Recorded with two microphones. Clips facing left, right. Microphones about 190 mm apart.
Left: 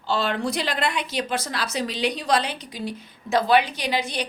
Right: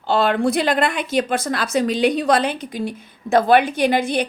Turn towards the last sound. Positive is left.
turn(degrees=-55)  # may be behind; listen again after turning